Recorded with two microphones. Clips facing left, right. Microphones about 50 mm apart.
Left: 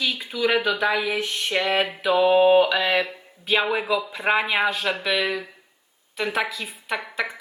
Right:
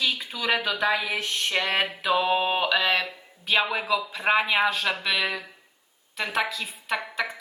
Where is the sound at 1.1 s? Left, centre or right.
Centre.